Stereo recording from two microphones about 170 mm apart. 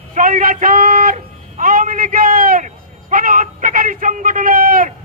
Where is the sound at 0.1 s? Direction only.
50° right (ahead or behind).